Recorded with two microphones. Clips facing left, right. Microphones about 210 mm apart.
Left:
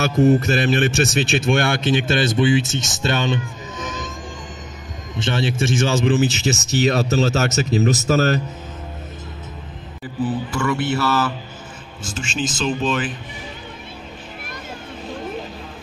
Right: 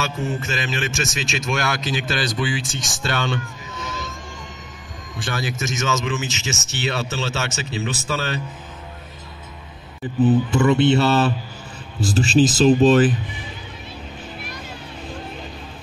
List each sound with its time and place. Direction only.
0.4 s speech: 35° left (ahead or behind); by 4.1 s 15° left (ahead or behind)
5.1 s speech: 25° left (ahead or behind); by 8.4 s 40° left (ahead or behind)
10.2 s speech: 20° right (ahead or behind)